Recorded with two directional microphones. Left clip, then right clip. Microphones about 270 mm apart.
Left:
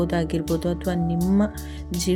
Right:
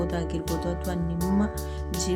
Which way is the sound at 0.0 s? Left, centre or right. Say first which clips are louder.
Left 5 dB; centre.